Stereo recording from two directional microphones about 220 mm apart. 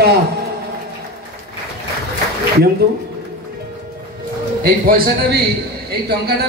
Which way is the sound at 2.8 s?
45° right (ahead or behind).